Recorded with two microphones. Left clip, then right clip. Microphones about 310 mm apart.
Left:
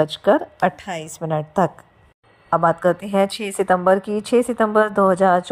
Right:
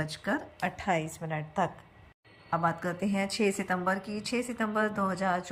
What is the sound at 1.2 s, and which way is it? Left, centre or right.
A woman's voice, left.